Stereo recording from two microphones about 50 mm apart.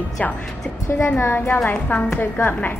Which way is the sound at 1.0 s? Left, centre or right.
Left.